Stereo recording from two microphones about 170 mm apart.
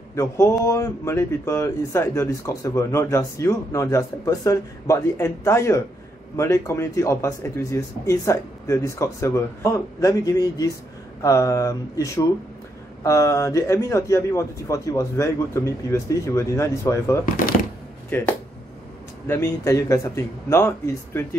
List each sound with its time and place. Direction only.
0.1 s a man's voice: 15° left (ahead or behind)
19.2 s a man's voice: 15° left (ahead or behind)